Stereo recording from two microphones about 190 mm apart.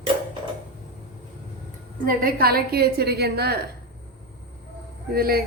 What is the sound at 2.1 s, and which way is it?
A woman's voice, 50° right (ahead or behind).